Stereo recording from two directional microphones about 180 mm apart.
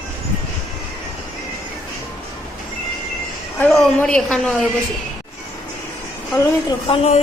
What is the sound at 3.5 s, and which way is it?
A woman's voice, 5° left (ahead or behind).